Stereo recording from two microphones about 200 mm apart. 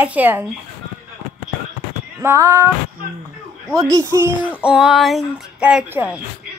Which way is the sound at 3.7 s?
20° right (ahead or behind).